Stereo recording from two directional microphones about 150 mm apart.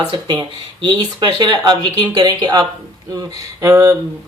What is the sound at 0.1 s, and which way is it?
Speech, 30° right (ahead or behind).